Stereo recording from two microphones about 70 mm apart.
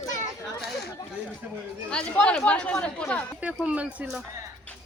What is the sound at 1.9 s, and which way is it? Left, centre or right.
Speech, centre.